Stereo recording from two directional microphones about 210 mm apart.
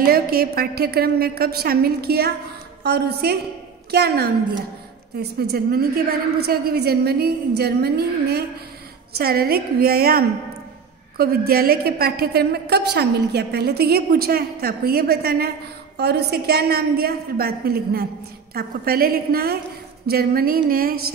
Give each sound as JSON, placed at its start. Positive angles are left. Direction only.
{"t": 0.0, "sound": "a woman's voice", "side_deg": -45}